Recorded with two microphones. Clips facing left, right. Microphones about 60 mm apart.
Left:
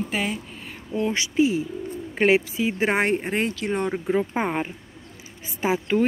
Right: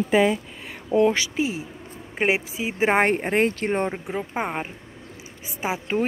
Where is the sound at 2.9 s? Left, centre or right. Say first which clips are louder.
Right 2 dB; right.